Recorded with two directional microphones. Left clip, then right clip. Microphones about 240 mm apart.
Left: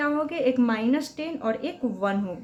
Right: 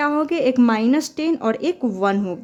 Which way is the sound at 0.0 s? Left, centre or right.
Right.